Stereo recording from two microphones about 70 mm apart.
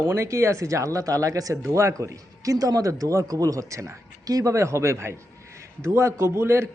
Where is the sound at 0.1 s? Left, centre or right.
Right.